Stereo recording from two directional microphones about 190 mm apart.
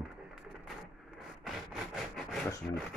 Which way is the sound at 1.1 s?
Centre (ahead or behind).